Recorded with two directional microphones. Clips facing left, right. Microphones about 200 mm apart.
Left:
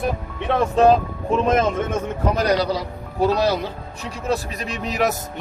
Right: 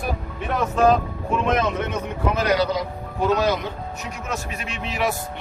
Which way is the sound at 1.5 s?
45° left (ahead or behind).